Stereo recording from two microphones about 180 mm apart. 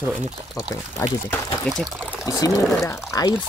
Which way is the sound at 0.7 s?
20° left (ahead or behind).